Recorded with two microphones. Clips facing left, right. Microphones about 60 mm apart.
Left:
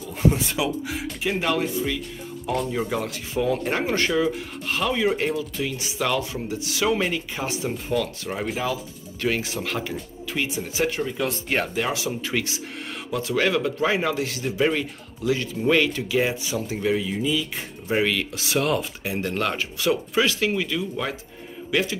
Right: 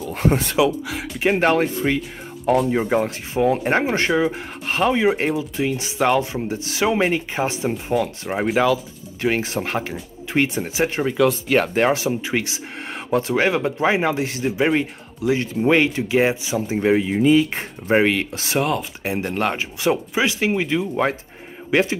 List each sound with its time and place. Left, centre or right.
0.0 s speech: right
0.6 s speech: right
1.4 s speech: right
2.8 s speech: right
10.3 s speech: right
10.7 s speech: right
11.1 s speech: right
11.7 s speech: right
12.1 s speech: right
12.9 s speech: right
16.8 s speech: right
17.1 s speech: right
18.6 s speech: centre
19.2 s speech: right